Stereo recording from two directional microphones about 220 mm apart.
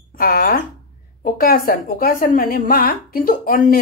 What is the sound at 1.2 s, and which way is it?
A woman's voice, 40° left (ahead or behind).